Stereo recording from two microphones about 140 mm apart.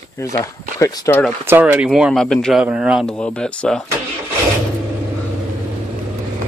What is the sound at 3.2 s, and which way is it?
Speech, 10° left (ahead or behind).